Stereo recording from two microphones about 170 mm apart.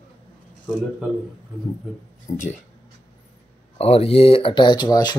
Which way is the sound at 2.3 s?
50° left (ahead or behind).